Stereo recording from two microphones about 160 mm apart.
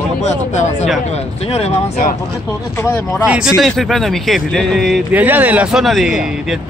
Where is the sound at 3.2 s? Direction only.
5° right (ahead or behind).